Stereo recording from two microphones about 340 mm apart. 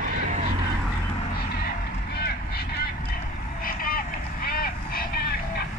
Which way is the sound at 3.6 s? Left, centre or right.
Left.